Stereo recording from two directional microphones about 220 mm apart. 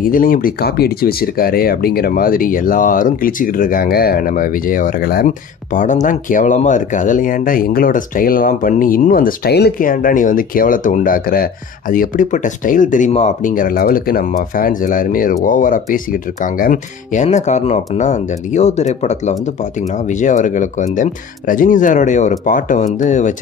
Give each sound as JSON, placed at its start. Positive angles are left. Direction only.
{"t": 0.0, "sound": "speech", "side_deg": 40}